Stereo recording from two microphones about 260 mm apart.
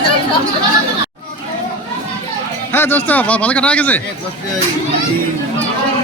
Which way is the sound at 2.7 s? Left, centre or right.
Centre.